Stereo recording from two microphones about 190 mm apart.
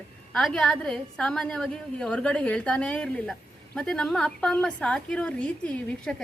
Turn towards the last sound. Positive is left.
turn(degrees=5)  # may be behind; listen again after turning